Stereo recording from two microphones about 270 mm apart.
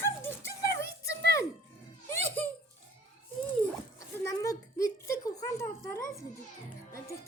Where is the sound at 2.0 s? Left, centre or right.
Centre.